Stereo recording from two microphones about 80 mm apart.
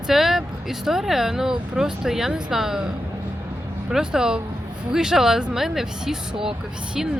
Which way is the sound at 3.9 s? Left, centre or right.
Centre.